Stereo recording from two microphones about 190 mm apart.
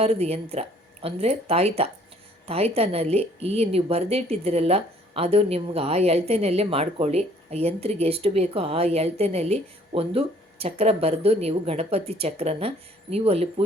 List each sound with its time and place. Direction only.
0.0 s a woman's voice: 35° right (ahead or behind)